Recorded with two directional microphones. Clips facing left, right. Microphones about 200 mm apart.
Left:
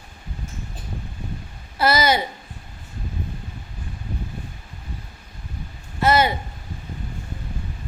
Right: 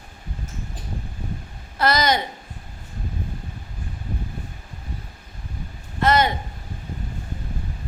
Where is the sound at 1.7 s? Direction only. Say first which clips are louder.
Left 1 dB; 5° left (ahead or behind).